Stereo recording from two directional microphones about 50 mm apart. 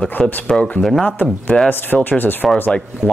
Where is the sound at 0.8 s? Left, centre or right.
Centre.